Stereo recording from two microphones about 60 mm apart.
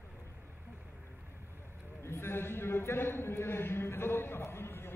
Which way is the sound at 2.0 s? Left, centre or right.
Left.